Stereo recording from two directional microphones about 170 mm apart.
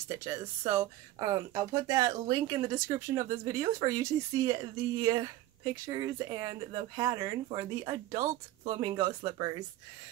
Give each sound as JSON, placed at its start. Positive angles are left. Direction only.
{"t": 0.2, "sound": "speech", "side_deg": -20}